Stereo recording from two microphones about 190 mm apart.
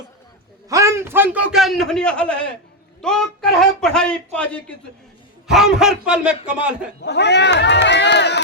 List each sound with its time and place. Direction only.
0.7 s a man's voice: 15° right (ahead or behind)
7.0 s speech: 65° left (ahead or behind)